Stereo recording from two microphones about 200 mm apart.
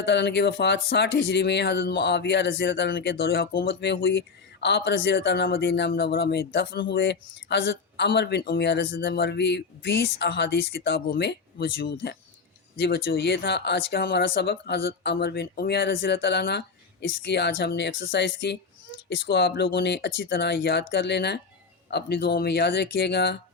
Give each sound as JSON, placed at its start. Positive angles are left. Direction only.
{"t": 0.0, "sound": "speech", "side_deg": 60}